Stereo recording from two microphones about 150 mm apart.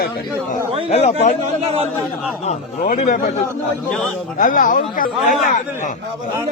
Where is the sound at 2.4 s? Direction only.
50° left (ahead or behind).